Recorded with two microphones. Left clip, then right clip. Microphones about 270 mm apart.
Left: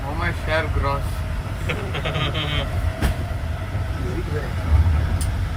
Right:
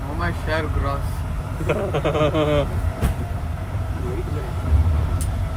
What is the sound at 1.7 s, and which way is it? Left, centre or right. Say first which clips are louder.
Speech: right 5 dB; right.